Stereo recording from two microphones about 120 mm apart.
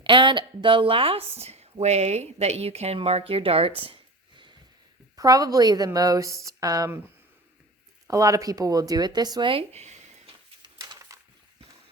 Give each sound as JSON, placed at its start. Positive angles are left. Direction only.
{"t": 0.0, "sound": "a woman's voice", "side_deg": -40}
{"t": 1.4, "sound": "speech", "side_deg": -60}
{"t": 5.1, "sound": "a woman's voice", "side_deg": -30}
{"t": 8.0, "sound": "a woman's voice", "side_deg": -30}
{"t": 9.5, "sound": "a sound", "side_deg": -60}
{"t": 11.1, "sound": "a sound", "side_deg": -25}